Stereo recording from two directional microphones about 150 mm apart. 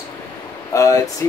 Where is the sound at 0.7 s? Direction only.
20° left (ahead or behind).